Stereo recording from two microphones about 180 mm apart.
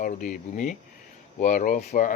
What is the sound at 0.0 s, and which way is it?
Speech, 50° left (ahead or behind).